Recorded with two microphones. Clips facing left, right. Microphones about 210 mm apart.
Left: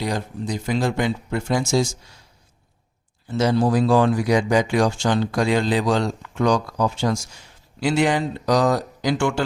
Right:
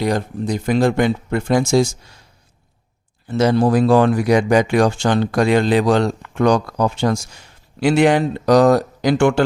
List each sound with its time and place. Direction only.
0.0 s speech: 60° right (ahead or behind)
3.2 s speech: 60° right (ahead or behind)